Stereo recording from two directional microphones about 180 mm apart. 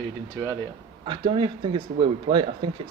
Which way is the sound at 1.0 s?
30° right (ahead or behind).